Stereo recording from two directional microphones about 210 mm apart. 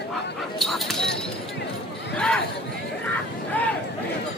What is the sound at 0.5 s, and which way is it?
Speech, centre (ahead or behind).